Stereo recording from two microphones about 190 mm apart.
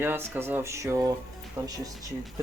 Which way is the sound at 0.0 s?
10° right (ahead or behind).